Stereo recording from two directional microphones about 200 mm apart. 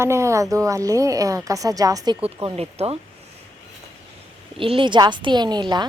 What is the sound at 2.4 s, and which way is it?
Speech, 30° right (ahead or behind).